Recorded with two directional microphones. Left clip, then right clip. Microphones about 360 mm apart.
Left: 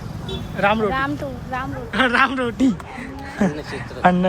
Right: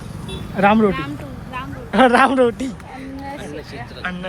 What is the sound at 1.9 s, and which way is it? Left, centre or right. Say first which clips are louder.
Speech: right 5 dB; centre.